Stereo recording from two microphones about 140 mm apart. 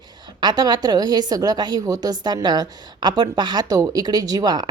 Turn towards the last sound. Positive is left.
turn(degrees=-30)  # may be behind; listen again after turning